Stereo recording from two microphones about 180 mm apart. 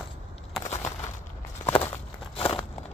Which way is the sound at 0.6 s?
40° left (ahead or behind).